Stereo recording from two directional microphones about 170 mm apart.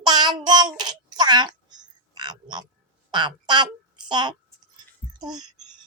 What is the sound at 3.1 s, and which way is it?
A woman's voice, 25° right (ahead or behind).